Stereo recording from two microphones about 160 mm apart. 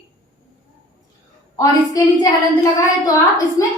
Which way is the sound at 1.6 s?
20° left (ahead or behind).